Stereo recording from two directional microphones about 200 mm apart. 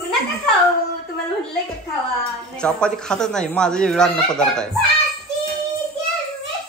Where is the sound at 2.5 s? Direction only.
5° left (ahead or behind).